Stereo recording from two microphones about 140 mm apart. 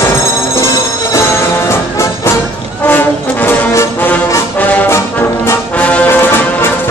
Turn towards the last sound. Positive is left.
turn(degrees=15)  # may be behind; listen again after turning